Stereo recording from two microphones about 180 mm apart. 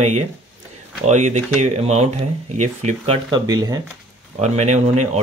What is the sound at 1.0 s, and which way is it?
Speech, 40° right (ahead or behind).